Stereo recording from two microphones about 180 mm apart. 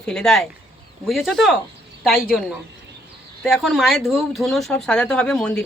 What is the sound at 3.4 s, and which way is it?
Speech, centre (ahead or behind).